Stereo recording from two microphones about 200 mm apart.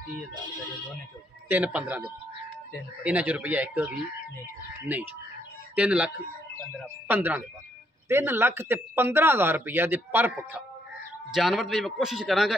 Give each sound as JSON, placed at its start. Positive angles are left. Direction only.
{"t": 1.5, "sound": "a man's voice", "side_deg": -5}